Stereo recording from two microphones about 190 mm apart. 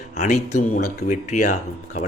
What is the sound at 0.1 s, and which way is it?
Speech, 40° left (ahead or behind).